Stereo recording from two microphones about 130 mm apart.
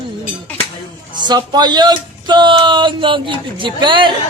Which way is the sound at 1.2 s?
35° right (ahead or behind).